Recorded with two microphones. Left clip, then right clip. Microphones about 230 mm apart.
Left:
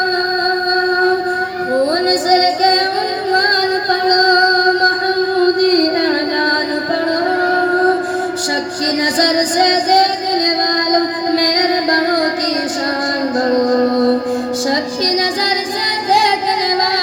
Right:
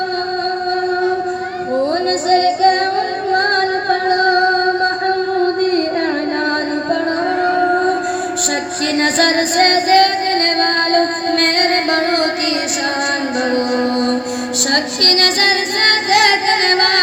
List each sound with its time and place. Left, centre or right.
2.0 s music: left
9.1 s music: left
13.7 s music: left
14.7 s female singing: left; by 17.0 s centre